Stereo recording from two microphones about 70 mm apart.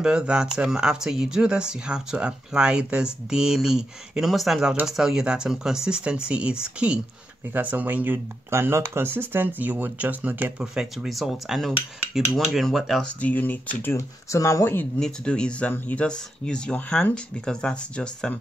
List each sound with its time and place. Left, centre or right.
0.0 s speech: centre
7.5 s speech: right
8.5 s speech: right
10.6 s dishes: centre
13.2 s speech: left
13.9 s speech: left
15.0 s speech: centre